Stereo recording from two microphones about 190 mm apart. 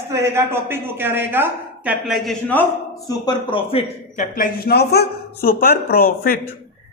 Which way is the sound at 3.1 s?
25° left (ahead or behind).